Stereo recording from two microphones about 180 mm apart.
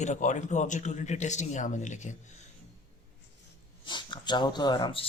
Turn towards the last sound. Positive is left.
turn(degrees=25)  # may be behind; listen again after turning